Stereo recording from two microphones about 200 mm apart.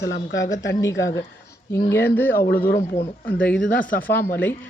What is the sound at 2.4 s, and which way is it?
Speech, 50° left (ahead or behind).